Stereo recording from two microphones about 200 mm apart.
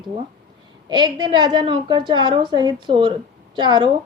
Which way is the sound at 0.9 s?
20° right (ahead or behind).